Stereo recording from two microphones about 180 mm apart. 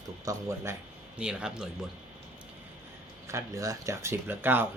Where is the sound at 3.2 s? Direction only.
15° right (ahead or behind).